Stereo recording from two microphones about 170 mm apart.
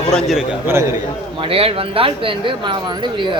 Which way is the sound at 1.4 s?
35° right (ahead or behind).